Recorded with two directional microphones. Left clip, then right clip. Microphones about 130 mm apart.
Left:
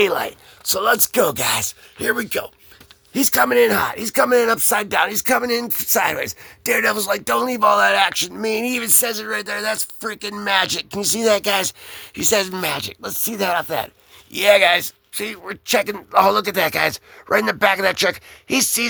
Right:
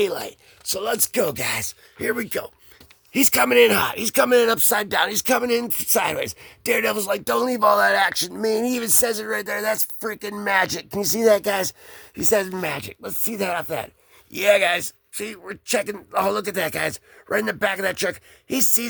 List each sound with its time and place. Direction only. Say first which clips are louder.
0.0 s speech: left 5 dB; 15° right (ahead or behind)
2.3 s speech: left 4 dB; 40° right (ahead or behind)
8.6 s speech: left 1 dB; 60° right (ahead or behind); by 13.9 s 30° right (ahead or behind)
14.3 s speech: left 4 dB; 40° right (ahead or behind)